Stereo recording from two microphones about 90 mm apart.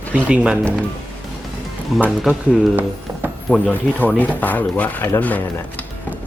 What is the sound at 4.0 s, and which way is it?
Speech, 20° left (ahead or behind).